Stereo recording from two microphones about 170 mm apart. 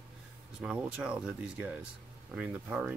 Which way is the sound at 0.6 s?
5° right (ahead or behind).